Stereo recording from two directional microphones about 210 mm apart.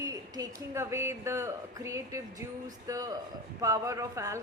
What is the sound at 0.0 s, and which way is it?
A woman's voice, 15° right (ahead or behind).